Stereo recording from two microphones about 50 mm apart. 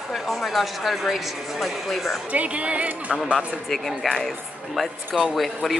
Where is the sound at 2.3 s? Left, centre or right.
Right.